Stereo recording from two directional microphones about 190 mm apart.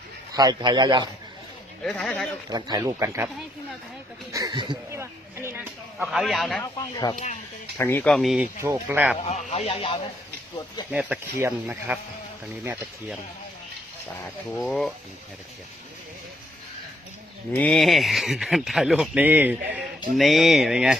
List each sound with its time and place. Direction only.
0.3 s speech: 20° right (ahead or behind)
1.8 s speech: centre (ahead or behind)
2.5 s speech: 20° right (ahead or behind)
4.3 s speech: 20° right (ahead or behind)
6.0 s speech: centre (ahead or behind)
6.6 s speech: 20° left (ahead or behind)
7.8 s speech: 10° left (ahead or behind)
8.6 s speech: 10° right (ahead or behind)
9.2 s speech: 35° left (ahead or behind)
10.9 s speech: 10° right (ahead or behind)
14.5 s speech: 5° left (ahead or behind)
17.5 s speech: 5° left (ahead or behind)